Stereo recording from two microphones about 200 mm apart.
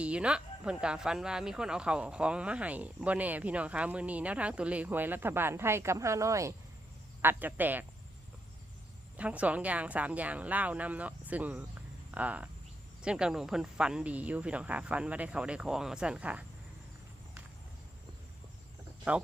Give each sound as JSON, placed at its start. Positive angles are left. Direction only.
{"t": 0.0, "sound": "speech", "side_deg": -5}
{"t": 9.1, "sound": "speech", "side_deg": -5}
{"t": 19.1, "sound": "speech", "side_deg": -5}